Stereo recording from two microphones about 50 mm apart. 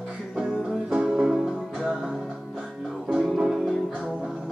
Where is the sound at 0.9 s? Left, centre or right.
Right.